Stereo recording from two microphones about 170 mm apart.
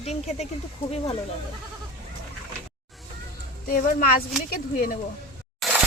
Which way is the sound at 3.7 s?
55° left (ahead or behind).